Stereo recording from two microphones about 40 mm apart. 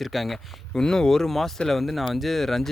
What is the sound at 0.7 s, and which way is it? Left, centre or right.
Speech, centre.